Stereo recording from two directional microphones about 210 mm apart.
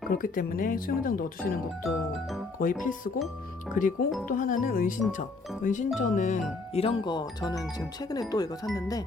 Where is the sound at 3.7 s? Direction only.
40° left (ahead or behind).